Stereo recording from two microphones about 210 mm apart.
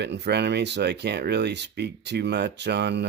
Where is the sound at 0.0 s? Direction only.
55° right (ahead or behind).